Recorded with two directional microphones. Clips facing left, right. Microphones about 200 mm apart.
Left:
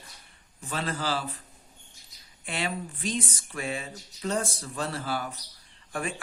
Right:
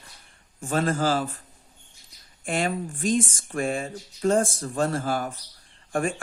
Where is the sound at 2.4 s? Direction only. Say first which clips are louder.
Right 6 dB; 45° right (ahead or behind).